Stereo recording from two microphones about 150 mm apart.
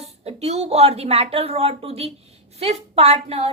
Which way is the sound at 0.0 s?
45° right (ahead or behind).